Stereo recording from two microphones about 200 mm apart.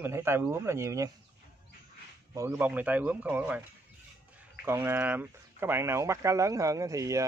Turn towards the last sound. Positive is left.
turn(degrees=-15)  # may be behind; listen again after turning